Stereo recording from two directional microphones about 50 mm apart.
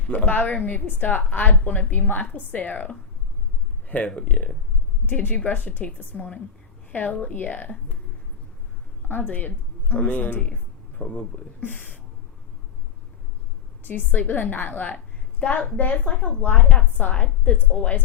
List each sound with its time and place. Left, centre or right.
0.1 s a woman's voice: left
5.0 s a woman's voice: left
9.0 s a woman's voice: left
10.9 s speech: left
11.6 s a woman's voice: left
13.8 s a woman's voice: left